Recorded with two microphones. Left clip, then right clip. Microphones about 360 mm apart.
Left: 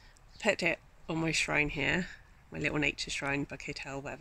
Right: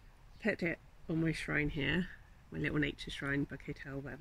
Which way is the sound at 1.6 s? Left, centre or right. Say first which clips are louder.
Left 5 dB; left.